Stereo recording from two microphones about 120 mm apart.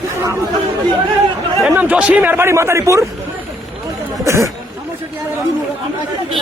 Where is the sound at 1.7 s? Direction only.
10° right (ahead or behind).